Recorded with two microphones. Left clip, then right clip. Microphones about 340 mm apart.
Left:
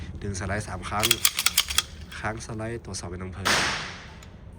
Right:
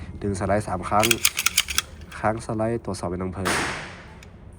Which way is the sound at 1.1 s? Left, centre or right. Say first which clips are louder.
Right 2 dB; left.